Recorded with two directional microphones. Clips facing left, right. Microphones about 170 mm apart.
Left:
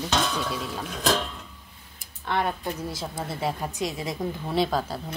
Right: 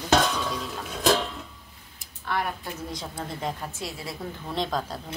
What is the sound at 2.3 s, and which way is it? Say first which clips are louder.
Speech: left 3 dB; 25° left (ahead or behind).